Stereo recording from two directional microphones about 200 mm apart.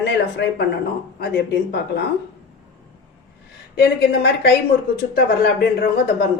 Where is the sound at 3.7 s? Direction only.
55° left (ahead or behind).